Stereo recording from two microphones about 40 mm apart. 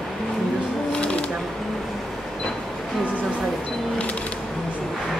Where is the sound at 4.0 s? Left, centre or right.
Left.